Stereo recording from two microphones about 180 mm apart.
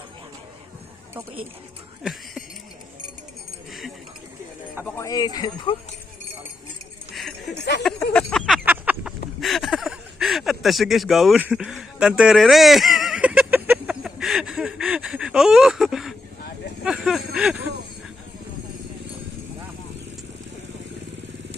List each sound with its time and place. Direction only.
3.7 s keys jangling: centre (ahead or behind)
4.9 s speech: 20° left (ahead or behind)
7.1 s a sound: centre (ahead or behind)